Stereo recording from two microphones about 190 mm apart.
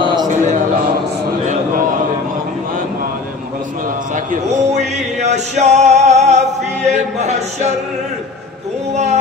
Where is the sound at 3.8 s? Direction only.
45° right (ahead or behind).